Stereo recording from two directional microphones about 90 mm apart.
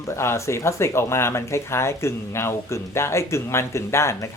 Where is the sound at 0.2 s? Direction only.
30° left (ahead or behind).